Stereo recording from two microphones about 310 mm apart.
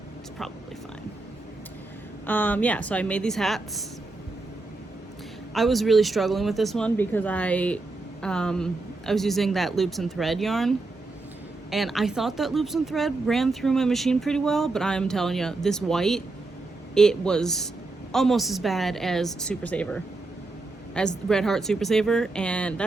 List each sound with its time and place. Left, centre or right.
2.2 s speech: centre
5.5 s speech: centre